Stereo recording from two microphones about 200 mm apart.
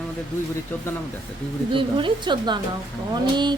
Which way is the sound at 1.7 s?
25° right (ahead or behind).